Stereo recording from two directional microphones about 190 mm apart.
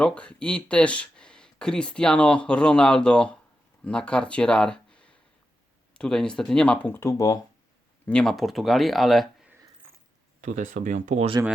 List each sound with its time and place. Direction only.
0.0 s speech: 5° left (ahead or behind)
8.0 s speech: 5° left (ahead or behind)
10.4 s speech: 40° right (ahead or behind)